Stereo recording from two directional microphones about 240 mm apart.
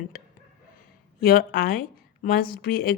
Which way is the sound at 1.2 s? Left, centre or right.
Left.